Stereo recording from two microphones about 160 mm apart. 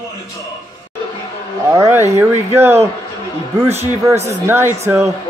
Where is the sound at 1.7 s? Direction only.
20° right (ahead or behind).